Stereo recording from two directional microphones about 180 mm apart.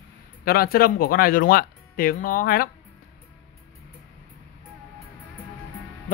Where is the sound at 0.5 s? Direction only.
55° left (ahead or behind).